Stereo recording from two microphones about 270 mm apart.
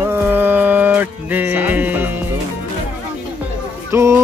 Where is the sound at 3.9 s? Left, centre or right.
Centre.